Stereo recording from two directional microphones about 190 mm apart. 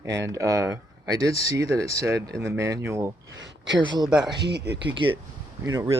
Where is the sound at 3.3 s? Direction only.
70° right (ahead or behind).